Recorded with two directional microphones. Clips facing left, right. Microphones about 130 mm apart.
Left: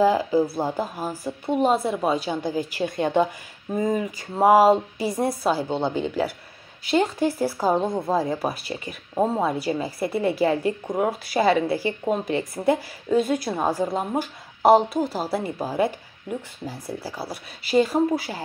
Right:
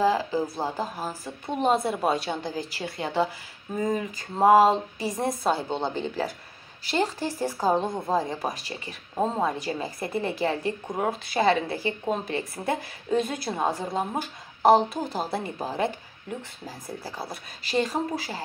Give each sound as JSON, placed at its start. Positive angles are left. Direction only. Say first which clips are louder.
{"t": 0.0, "sound": "a woman's voice", "louder": "left 4 dB", "side_deg": 15}
{"t": 2.8, "sound": "a woman's voice", "louder": "left 5 dB", "side_deg": 20}
{"t": 4.4, "sound": "a woman's voice", "louder": "left 2 dB", "side_deg": 10}
{"t": 7.3, "sound": "a woman's voice", "louder": "right 2 dB", "side_deg": 10}